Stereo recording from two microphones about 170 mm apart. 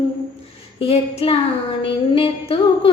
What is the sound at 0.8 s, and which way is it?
Child singing, 35° left (ahead or behind).